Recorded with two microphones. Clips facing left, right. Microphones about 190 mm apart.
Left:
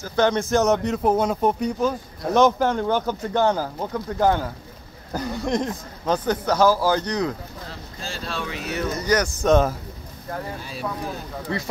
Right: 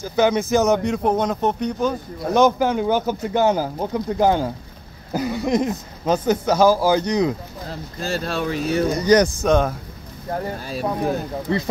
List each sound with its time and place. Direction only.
0.0 s speech: 10° right (ahead or behind)
8.0 s speech: 45° right (ahead or behind)
8.6 s speech: 30° right (ahead or behind)
8.9 s speech: 20° right (ahead or behind)
9.4 s speech: centre (ahead or behind)
10.7 s speech: 40° right (ahead or behind)
11.5 s speech: 25° right (ahead or behind)